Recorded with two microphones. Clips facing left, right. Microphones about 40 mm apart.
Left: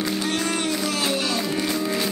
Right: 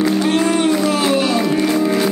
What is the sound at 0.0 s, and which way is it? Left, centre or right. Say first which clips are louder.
Music: right 9 dB; right.